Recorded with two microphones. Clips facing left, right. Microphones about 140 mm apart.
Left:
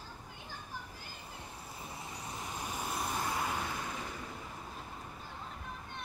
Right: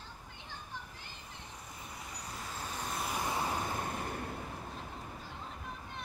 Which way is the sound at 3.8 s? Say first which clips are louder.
Right 3 dB; 55° right (ahead or behind).